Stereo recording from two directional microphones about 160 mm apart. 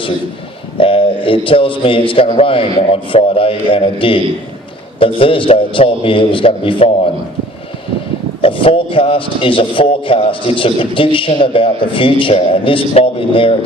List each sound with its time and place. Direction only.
0.7 s a man's voice: 35° left (ahead or behind)
8.4 s a man's voice: 35° left (ahead or behind)